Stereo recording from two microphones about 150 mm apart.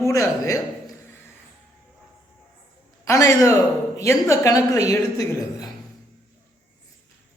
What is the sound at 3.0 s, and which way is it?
A woman's voice, 20° left (ahead or behind).